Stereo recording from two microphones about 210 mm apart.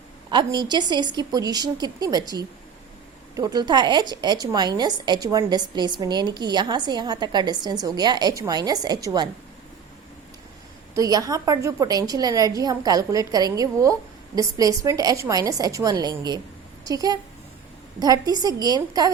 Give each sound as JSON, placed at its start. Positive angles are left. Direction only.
{"t": 0.3, "sound": "a woman's voice", "side_deg": -20}
{"t": 10.9, "sound": "a woman's voice", "side_deg": -15}